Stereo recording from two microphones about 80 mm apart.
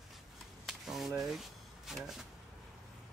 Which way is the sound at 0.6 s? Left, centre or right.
Centre.